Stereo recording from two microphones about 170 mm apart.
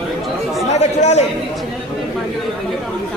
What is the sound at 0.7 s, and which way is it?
Speech, 40° left (ahead or behind).